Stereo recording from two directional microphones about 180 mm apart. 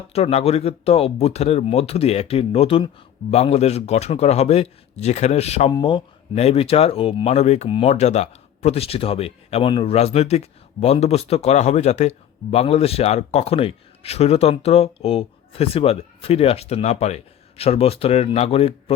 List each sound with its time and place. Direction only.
0.1 s speech: 35° left (ahead or behind)